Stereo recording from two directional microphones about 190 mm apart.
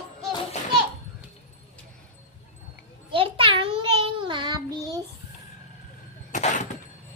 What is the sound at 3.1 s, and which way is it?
Child singing, 30° right (ahead or behind).